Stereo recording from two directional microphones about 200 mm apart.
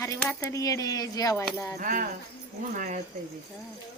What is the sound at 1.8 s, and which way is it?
Speech, 40° right (ahead or behind).